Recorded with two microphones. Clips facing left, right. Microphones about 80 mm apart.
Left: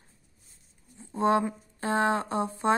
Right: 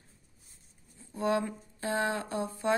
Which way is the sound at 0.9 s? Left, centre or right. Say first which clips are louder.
Left 5 dB; left.